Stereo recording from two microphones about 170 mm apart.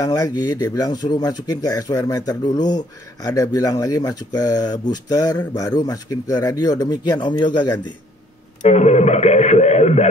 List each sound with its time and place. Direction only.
0.0 s speech: 20° left (ahead or behind)
8.6 s speech: 40° left (ahead or behind)